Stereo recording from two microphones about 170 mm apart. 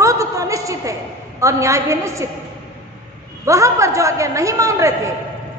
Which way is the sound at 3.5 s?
20° right (ahead or behind).